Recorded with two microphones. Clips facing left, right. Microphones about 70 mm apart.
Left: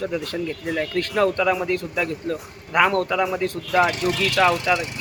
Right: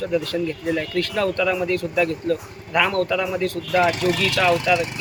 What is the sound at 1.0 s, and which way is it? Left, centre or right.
Speech, left.